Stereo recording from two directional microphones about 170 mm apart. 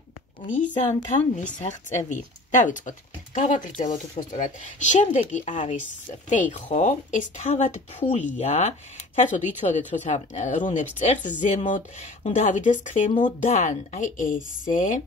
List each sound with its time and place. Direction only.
0.6 s speech: 45° left (ahead or behind)